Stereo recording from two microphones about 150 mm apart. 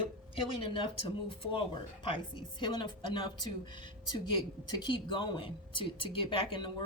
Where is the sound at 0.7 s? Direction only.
35° left (ahead or behind).